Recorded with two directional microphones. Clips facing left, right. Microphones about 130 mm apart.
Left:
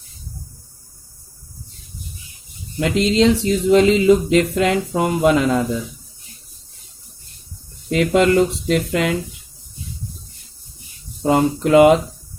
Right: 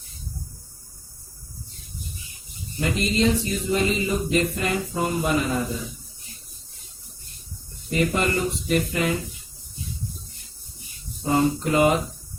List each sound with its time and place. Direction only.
2.7 s speech: 90° left
7.9 s speech: 90° left
11.2 s speech: 85° left